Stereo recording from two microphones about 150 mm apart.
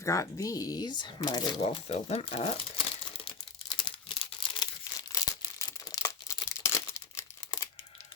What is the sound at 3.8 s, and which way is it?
Crumpling, 35° left (ahead or behind).